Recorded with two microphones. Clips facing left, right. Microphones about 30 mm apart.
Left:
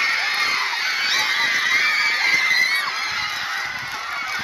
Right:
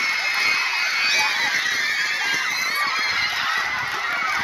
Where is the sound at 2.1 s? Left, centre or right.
Left.